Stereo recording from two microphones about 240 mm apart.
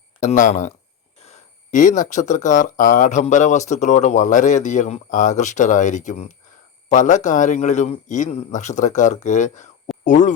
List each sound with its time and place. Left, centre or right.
0.2 s speech: left
1.7 s a man's voice: left